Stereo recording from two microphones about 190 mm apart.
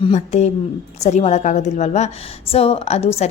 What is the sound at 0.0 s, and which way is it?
A woman's voice, 35° left (ahead or behind).